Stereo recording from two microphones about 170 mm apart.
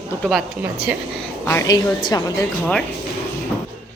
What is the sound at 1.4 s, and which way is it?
Speech, 20° left (ahead or behind).